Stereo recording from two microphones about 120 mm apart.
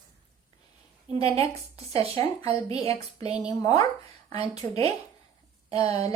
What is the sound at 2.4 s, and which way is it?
Speech, 55° right (ahead or behind).